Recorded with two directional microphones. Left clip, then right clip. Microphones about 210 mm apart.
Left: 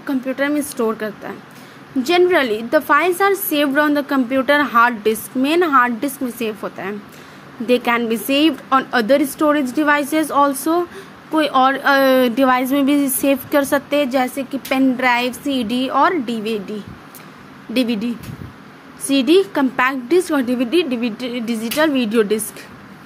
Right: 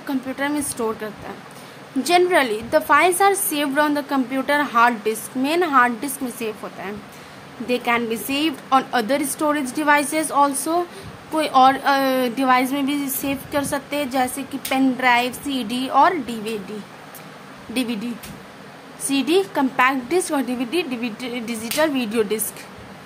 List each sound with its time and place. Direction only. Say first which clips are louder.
0.0 s a woman's voice: left 4 dB; 15° left (ahead or behind)
17.7 s a woman's voice: left 6 dB; 15° left (ahead or behind)